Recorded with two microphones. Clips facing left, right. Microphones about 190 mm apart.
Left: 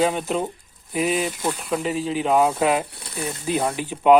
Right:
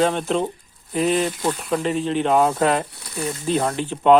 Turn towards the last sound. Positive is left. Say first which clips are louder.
# even
turn(degrees=10)  # may be behind; listen again after turning